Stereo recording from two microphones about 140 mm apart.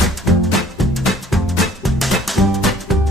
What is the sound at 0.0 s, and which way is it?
Music, centre (ahead or behind).